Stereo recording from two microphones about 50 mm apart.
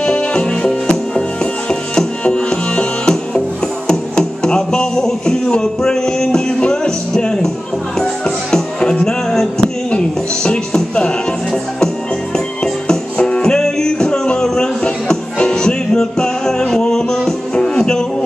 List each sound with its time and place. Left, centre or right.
0.0 s music: centre